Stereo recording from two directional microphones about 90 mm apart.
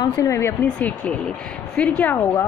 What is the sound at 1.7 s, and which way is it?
Speech, 15° left (ahead or behind).